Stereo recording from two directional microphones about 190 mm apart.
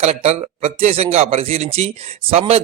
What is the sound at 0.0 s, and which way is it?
Speech, 35° right (ahead or behind).